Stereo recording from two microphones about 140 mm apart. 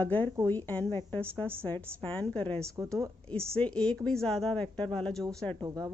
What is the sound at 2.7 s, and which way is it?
Speech, 20° right (ahead or behind).